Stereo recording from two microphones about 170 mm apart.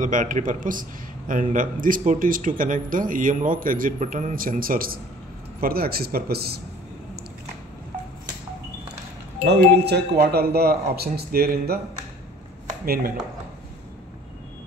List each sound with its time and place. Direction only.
0.0 s a man's voice: 50° right (ahead or behind); by 6.6 s 65° right (ahead or behind)
9.4 s a man's voice: 75° right (ahead or behind)
12.8 s speech: 60° right (ahead or behind)